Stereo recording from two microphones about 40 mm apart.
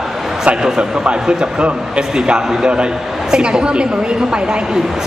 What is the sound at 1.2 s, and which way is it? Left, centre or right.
A man's voice, right.